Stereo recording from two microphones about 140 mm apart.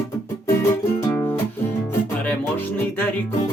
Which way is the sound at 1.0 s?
15° left (ahead or behind).